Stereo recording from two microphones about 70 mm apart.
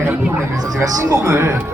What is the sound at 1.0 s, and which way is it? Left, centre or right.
Speech, right.